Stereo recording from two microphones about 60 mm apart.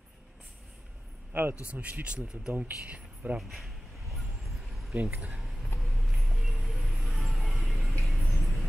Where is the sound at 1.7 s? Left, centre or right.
Right.